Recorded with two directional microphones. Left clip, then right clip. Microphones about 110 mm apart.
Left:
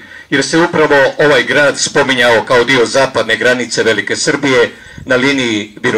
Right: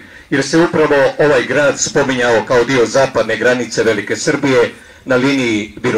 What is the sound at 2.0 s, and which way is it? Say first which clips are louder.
Speech: left 5 dB; 55° left (ahead or behind).